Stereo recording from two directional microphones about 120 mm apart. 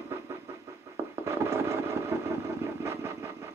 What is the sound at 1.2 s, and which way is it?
Vehicle, 20° right (ahead or behind).